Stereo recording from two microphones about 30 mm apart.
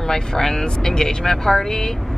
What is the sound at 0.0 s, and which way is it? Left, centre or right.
Speech, centre.